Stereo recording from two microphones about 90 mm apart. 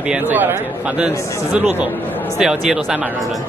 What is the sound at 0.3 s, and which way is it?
Speech, 20° right (ahead or behind).